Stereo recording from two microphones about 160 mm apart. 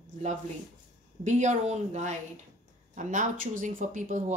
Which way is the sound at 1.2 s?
50° right (ahead or behind).